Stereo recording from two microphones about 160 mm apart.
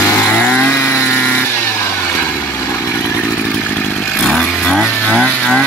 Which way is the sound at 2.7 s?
15° left (ahead or behind).